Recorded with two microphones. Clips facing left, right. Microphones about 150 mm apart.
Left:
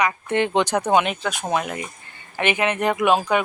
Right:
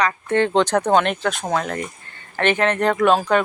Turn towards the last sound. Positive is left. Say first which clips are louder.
# right 2 dB
turn(degrees=10)  # may be behind; listen again after turning